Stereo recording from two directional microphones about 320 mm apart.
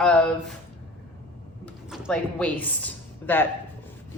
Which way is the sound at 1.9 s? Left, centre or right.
Centre.